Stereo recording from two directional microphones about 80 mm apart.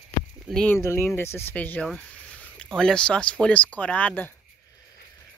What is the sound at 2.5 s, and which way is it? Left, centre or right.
Speech, centre.